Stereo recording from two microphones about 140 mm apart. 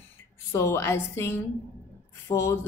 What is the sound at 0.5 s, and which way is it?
A woman's voice, 20° left (ahead or behind).